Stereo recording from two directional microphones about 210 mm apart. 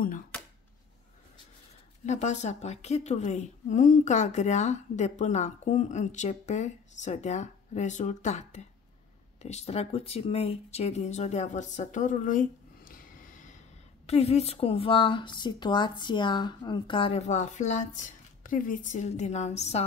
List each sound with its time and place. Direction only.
2.0 s a woman's voice: 35° left (ahead or behind)